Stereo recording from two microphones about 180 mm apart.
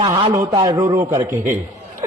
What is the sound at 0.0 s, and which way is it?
A man's voice, 20° right (ahead or behind).